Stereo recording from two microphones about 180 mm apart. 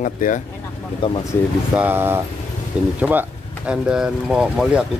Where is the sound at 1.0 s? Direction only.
25° left (ahead or behind).